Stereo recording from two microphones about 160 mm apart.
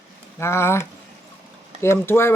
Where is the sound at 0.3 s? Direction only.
15° left (ahead or behind).